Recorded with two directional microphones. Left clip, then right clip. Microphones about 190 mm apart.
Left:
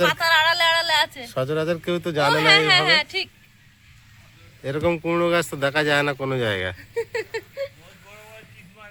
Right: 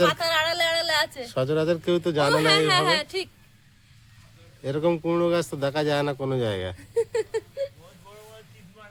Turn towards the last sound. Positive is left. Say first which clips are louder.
# right 1 dB
turn(degrees=-55)  # may be behind; listen again after turning